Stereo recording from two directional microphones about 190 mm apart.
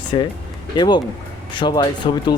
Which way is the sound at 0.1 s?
25° left (ahead or behind).